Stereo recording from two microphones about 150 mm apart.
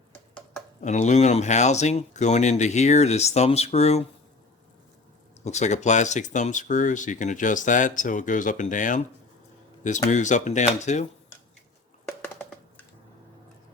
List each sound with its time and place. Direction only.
0.8 s speech: 55° left (ahead or behind)
5.5 s speech: 50° left (ahead or behind)
12.2 s a sound: 10° left (ahead or behind)